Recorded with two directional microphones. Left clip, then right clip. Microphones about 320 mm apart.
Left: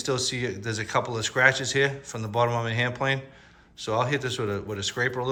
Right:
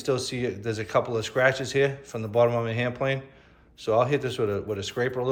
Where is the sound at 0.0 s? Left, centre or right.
Centre.